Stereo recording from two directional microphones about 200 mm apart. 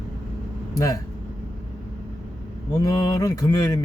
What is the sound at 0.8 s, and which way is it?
Speech, 15° left (ahead or behind).